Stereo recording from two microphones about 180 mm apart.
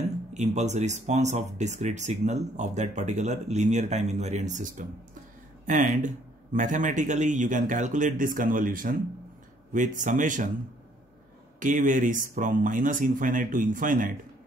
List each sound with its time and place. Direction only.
0.3 s speech: 40° right (ahead or behind)
11.6 s speech: 45° right (ahead or behind)